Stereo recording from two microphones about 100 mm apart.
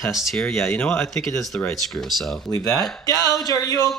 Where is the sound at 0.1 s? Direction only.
5° left (ahead or behind).